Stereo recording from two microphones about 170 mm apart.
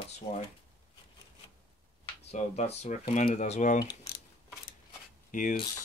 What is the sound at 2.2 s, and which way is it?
Speech, 40° left (ahead or behind).